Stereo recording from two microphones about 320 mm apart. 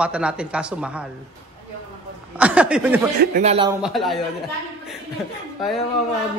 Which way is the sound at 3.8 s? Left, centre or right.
Centre.